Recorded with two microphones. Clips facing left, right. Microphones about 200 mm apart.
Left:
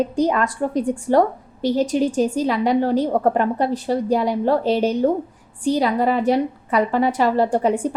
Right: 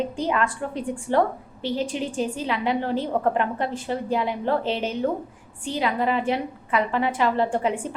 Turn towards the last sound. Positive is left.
turn(degrees=40)  # may be behind; listen again after turning